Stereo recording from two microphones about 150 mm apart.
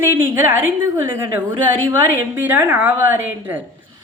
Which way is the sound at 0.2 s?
15° right (ahead or behind).